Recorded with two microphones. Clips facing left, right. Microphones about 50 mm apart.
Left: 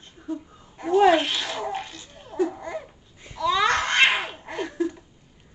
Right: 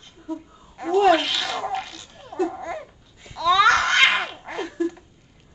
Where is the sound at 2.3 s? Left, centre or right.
Right.